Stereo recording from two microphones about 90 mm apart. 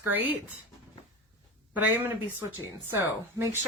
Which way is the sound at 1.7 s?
20° right (ahead or behind).